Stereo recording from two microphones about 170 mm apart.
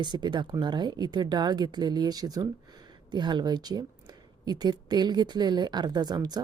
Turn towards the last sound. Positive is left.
turn(degrees=-25)  # may be behind; listen again after turning